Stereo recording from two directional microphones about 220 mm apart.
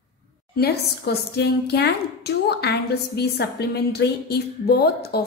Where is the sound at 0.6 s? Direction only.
45° left (ahead or behind).